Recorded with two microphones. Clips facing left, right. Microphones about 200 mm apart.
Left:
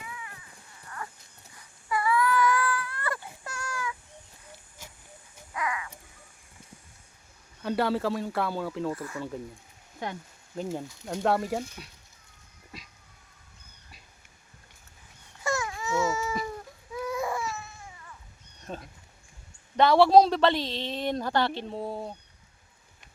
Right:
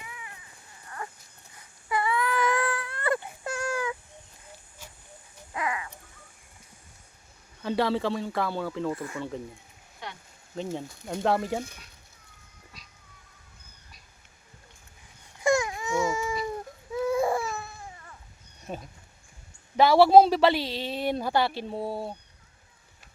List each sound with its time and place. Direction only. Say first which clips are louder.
1.9 s baby cry: left 2 dB; 25° right (ahead or behind)
5.5 s a sound: right 1 dB; 30° right (ahead or behind)
7.6 s speech: right 1 dB; 5° left (ahead or behind)
8.9 s speech: right 1 dB; 20° right (ahead or behind)
10.5 s speech: even; 5° left (ahead or behind)
15.4 s baby cry: right 6 dB; 15° right (ahead or behind)
16.9 s baby cry: right 6 dB; 25° right (ahead or behind)
18.7 s speech: right 2 dB; 10° right (ahead or behind)